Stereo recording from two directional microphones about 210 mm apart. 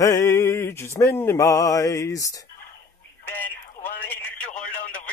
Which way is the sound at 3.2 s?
10° left (ahead or behind).